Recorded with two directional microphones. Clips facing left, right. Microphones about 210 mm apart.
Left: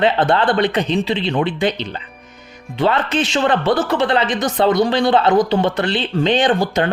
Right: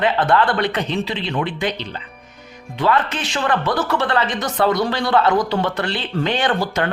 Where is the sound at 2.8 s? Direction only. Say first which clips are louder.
Left 2 dB; 25° left (ahead or behind).